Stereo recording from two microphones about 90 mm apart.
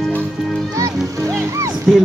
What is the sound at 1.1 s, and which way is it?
Speech, 35° right (ahead or behind).